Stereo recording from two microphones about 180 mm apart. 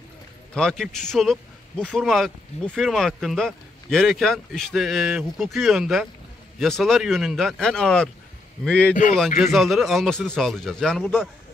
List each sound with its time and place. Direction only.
0.6 s speech: 5° left (ahead or behind)